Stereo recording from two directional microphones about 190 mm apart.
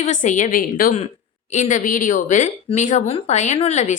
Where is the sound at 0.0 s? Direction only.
40° left (ahead or behind).